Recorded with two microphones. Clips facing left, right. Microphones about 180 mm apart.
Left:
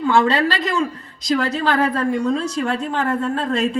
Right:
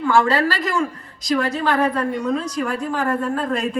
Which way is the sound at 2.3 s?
25° left (ahead or behind).